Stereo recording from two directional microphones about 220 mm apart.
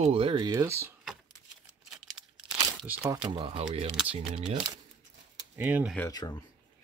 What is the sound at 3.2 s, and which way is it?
Speech, 25° right (ahead or behind).